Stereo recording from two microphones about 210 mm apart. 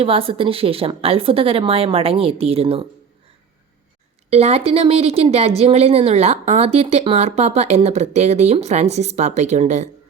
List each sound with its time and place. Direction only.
0.0 s a woman's voice: 25° right (ahead or behind)
4.3 s a woman's voice: 30° right (ahead or behind)